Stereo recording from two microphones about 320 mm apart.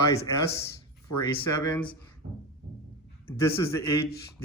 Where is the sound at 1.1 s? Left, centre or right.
Left.